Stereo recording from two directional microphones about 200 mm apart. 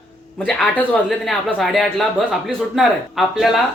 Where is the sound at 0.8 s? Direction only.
Centre (ahead or behind).